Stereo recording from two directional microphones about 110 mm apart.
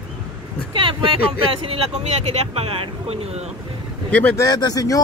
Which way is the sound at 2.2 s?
70° right (ahead or behind).